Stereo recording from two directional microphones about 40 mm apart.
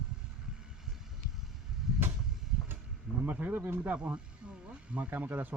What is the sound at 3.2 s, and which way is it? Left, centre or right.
Speech, right.